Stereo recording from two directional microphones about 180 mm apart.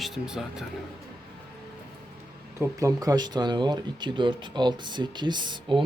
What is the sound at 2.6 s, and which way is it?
Speech, 20° right (ahead or behind).